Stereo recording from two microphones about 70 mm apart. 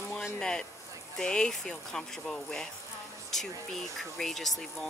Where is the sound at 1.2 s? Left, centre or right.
Centre.